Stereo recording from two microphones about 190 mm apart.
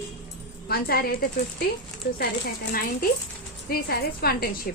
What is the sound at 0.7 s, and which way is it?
A woman's voice, 55° left (ahead or behind).